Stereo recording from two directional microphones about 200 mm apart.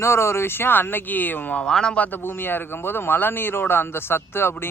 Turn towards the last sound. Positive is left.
turn(degrees=10)  # may be behind; listen again after turning